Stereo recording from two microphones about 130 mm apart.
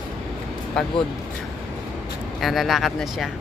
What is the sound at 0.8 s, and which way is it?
Speech, 5° left (ahead or behind).